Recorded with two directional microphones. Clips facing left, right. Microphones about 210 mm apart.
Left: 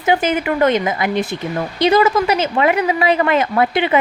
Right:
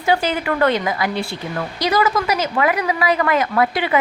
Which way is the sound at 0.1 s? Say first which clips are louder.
Left 2 dB; 20° left (ahead or behind).